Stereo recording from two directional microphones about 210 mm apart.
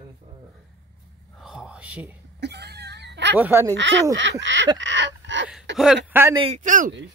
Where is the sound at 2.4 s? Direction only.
50° right (ahead or behind).